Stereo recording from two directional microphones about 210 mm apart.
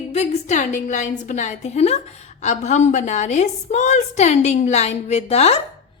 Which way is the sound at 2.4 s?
35° left (ahead or behind).